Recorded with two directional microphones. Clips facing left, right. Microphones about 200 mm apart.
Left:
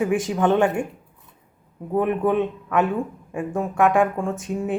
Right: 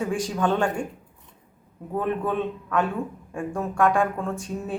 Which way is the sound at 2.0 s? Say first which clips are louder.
Left 5 dB; 15° left (ahead or behind).